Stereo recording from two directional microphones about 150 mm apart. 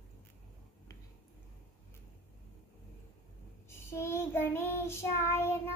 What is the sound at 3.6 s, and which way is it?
Child singing, 15° left (ahead or behind).